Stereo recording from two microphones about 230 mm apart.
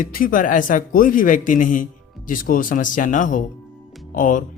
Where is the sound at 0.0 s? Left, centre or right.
Left.